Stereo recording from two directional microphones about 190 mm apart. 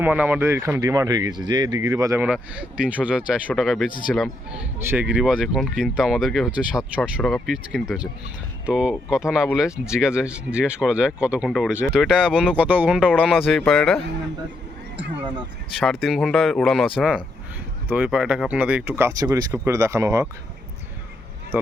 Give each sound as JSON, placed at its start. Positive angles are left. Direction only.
{"t": 0.0, "sound": "speech", "side_deg": -10}
{"t": 2.2, "sound": "speech", "side_deg": -5}
{"t": 4.9, "sound": "speech", "side_deg": -10}
{"t": 15.8, "sound": "speech", "side_deg": 0}